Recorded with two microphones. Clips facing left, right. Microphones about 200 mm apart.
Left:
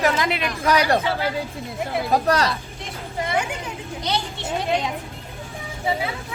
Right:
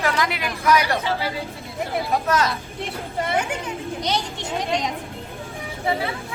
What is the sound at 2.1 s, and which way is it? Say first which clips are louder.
Speech: left 2 dB; 35° left (ahead or behind).